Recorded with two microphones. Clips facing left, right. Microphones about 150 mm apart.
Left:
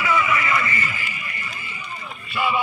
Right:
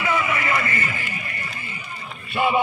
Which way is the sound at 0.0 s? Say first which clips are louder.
Left 1 dB; 35° right (ahead or behind).